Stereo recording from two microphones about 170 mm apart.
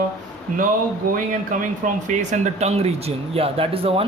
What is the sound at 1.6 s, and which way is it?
Speech, 50° right (ahead or behind).